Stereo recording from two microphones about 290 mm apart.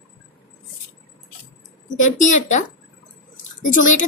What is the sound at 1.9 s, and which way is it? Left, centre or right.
Speech, left.